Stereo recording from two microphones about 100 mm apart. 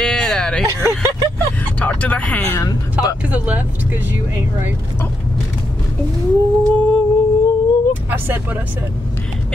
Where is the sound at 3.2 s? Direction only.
15° right (ahead or behind).